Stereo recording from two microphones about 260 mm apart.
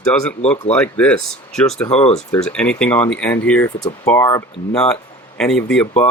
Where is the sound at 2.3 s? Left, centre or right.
Centre.